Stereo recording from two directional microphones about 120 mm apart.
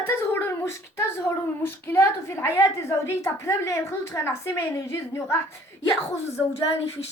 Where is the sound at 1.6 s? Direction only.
20° left (ahead or behind).